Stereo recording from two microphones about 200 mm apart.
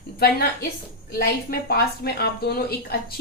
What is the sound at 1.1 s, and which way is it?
A woman's voice, 50° left (ahead or behind).